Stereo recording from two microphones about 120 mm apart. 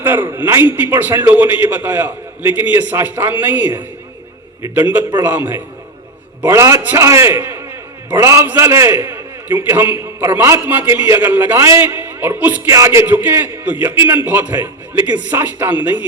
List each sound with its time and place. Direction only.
0.0 s a man's voice: 15° right (ahead or behind)
12.7 s a man's voice: 25° right (ahead or behind)